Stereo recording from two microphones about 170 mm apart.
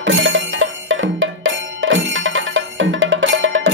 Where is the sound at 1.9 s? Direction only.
90° right.